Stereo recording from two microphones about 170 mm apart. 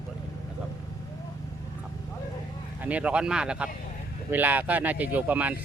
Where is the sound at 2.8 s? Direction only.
10° right (ahead or behind).